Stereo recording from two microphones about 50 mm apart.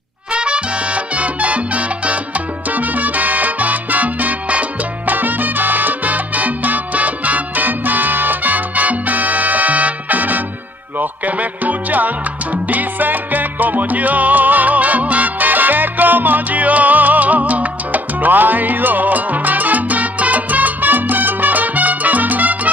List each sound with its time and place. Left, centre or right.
0.3 s salsa music: right
11.0 s music: right
12.6 s salsa music: right